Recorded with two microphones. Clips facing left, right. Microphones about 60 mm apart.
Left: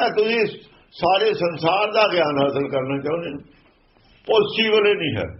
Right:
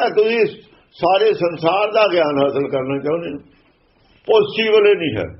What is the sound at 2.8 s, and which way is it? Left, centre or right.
Speech, centre.